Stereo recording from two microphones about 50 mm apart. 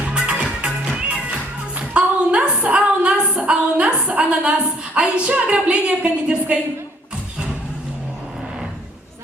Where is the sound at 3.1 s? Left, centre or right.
Centre.